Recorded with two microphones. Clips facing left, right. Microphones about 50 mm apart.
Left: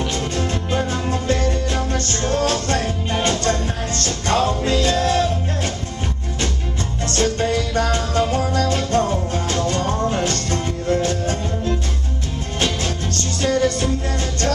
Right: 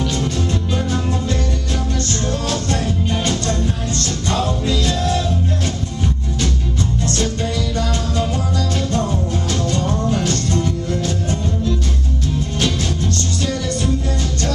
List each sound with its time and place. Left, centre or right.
0.0 s music: left
7.2 s music: left
13.4 s music: left